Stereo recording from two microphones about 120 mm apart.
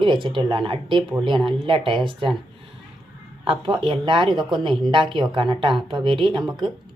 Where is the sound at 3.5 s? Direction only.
45° right (ahead or behind).